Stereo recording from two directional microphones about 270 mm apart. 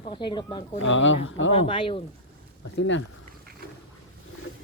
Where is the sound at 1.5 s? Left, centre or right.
Centre.